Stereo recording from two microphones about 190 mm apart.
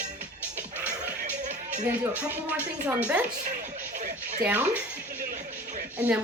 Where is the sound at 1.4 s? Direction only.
40° right (ahead or behind).